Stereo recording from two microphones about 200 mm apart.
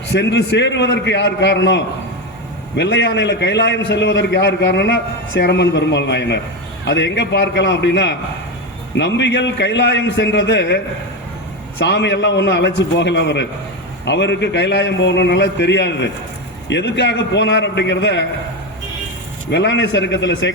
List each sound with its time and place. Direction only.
0.1 s a man's voice: 60° left (ahead or behind)
11.8 s a man's voice: 60° left (ahead or behind)
19.5 s a man's voice: 60° left (ahead or behind)